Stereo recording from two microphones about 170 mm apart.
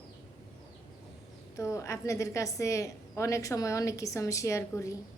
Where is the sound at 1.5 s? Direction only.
15° left (ahead or behind).